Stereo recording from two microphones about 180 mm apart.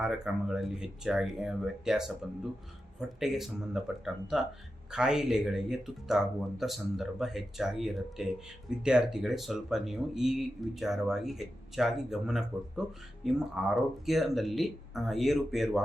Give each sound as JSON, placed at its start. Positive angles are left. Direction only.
{"t": 0.0, "sound": "speech", "side_deg": 0}
{"t": 3.2, "sound": "speech", "side_deg": 0}